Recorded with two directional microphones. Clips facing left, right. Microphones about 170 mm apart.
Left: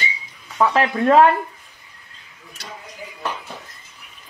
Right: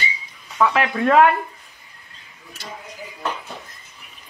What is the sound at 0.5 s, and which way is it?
Speech, 35° left (ahead or behind).